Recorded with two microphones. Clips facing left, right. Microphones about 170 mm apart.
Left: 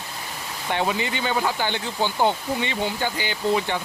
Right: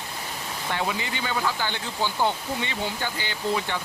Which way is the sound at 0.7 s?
25° left (ahead or behind).